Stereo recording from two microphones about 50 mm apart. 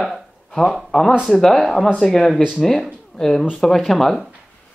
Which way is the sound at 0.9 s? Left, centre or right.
Centre.